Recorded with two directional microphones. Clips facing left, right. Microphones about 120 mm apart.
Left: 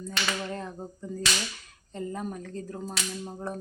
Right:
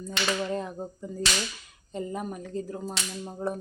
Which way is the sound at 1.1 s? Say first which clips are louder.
Left 4 dB; 5° right (ahead or behind).